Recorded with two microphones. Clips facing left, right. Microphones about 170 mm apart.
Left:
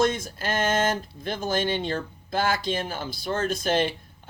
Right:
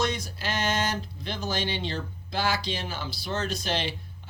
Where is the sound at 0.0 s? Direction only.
50° left (ahead or behind).